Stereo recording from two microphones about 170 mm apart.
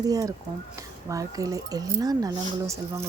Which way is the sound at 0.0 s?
20° right (ahead or behind).